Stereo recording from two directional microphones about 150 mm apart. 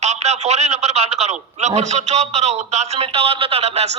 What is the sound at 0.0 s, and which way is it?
A man's voice, 50° right (ahead or behind).